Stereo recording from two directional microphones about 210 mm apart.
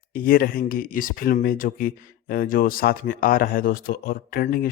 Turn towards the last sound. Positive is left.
turn(degrees=45)  # may be behind; listen again after turning